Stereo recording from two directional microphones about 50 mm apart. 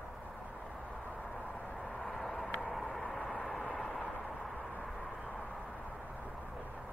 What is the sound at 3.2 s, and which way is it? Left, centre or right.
Vehicle, left.